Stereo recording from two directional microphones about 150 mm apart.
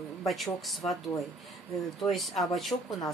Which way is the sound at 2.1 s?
Centre (ahead or behind).